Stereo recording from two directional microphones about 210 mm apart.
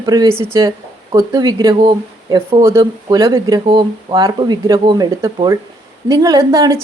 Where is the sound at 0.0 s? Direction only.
15° right (ahead or behind).